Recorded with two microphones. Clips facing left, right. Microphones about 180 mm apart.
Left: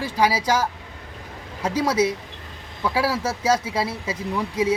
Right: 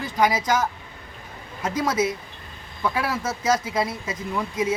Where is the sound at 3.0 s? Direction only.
30° left (ahead or behind).